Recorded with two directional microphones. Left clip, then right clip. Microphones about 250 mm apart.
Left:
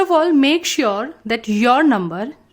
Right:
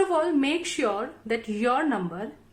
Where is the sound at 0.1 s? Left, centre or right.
Left.